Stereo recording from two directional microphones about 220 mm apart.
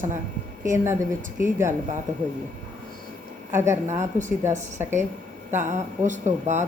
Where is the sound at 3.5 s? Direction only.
10° right (ahead or behind).